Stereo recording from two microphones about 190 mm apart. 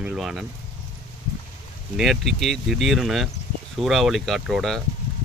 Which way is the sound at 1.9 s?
Centre (ahead or behind).